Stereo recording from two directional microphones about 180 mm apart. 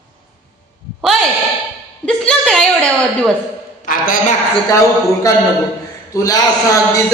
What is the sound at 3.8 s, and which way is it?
Speech, 50° left (ahead or behind).